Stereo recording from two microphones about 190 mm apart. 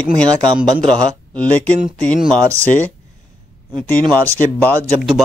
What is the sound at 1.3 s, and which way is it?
Speech, 5° left (ahead or behind).